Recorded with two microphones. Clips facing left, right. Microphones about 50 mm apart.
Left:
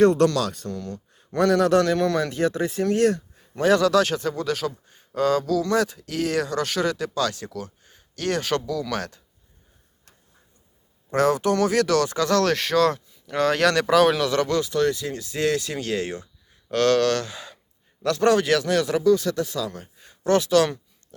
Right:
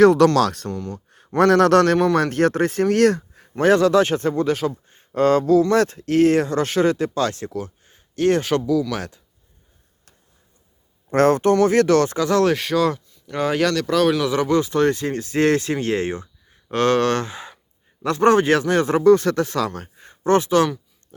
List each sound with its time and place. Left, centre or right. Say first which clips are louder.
0.0 s speech: right 5 dB; right
0.7 s speech: right 3 dB; right
1.4 s a man's voice: right 5 dB; right
2.1 s speech: right 5 dB; right
2.9 s a sound: right 4 dB; right
3.6 s speech: right 3 dB; right; by 9.2 s centre
11.1 s speech: right 5 dB; right
12.2 s speech: right 3 dB; centre
12.5 s speech: even; centre
13.7 s speech: left 3 dB; centre
14.3 s speech: right 3 dB; centre
14.6 s speech: right 4 dB; right
20.0 s a sound: right 3 dB; right